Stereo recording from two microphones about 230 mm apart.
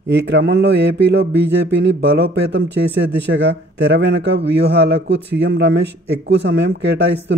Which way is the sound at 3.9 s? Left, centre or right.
Right.